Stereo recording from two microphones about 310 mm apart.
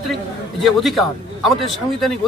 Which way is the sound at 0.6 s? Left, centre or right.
Centre.